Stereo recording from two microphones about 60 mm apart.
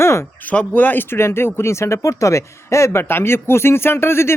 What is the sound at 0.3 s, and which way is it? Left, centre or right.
Speech, left.